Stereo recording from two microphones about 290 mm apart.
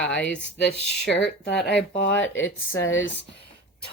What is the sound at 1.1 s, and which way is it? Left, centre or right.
Speech, left.